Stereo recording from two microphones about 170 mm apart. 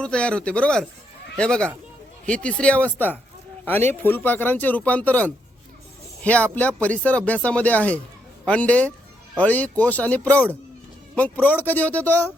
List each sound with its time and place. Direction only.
0.0 s speech: 5° left (ahead or behind)